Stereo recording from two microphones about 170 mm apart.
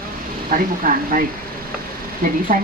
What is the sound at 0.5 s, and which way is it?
Speech, 55° right (ahead or behind).